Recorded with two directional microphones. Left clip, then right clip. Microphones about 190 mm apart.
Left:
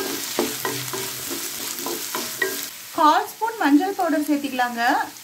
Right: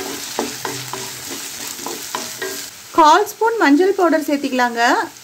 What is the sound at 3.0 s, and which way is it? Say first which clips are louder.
Speech: right 6 dB; 45° right (ahead or behind).